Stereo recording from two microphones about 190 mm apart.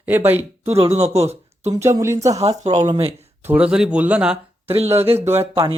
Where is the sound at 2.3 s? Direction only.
35° right (ahead or behind).